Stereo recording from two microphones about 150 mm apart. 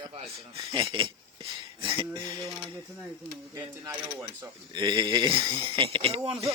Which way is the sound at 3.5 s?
15° right (ahead or behind).